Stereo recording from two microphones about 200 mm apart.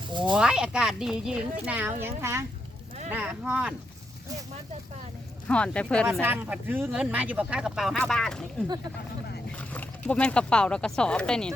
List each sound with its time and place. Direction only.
0.1 s speech: 25° right (ahead or behind)
0.3 s speech: 5° right (ahead or behind)
5.5 s speech: 5° left (ahead or behind)
6.1 s speech: 10° right (ahead or behind)
9.6 s speech: 5° left (ahead or behind)